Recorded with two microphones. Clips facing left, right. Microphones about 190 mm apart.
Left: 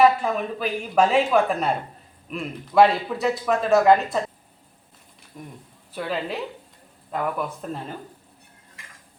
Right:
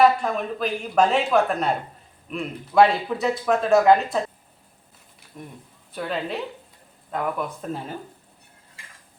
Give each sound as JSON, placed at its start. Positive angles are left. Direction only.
{"t": 0.0, "sound": "speech", "side_deg": 5}
{"t": 5.3, "sound": "speech", "side_deg": -5}
{"t": 8.8, "sound": "dishes", "side_deg": -30}